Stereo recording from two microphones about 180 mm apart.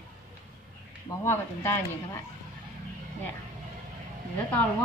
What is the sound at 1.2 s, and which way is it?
Speech, 10° left (ahead or behind).